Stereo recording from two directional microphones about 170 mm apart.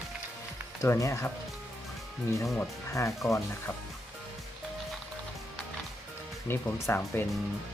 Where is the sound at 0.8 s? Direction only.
15° left (ahead or behind).